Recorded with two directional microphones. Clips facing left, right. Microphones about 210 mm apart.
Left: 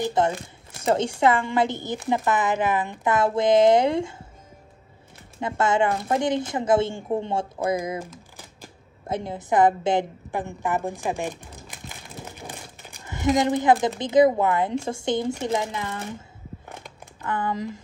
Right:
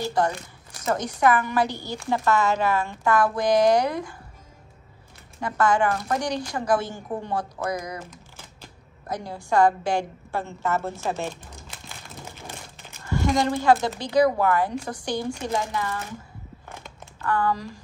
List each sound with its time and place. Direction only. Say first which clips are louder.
0.0 s a woman's voice: left 2 dB; 20° left (ahead or behind)
5.4 s a woman's voice: even; 25° left (ahead or behind)
8.0 s typing: left 4 dB; 10° left (ahead or behind)
9.0 s a woman's voice: left 3 dB; 25° left (ahead or behind)
17.2 s a woman's voice: right 2 dB; 20° left (ahead or behind)